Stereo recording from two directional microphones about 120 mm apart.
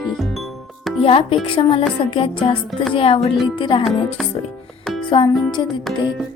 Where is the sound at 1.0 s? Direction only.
50° left (ahead or behind).